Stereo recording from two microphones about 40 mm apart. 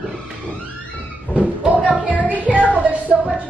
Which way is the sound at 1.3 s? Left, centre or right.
Right.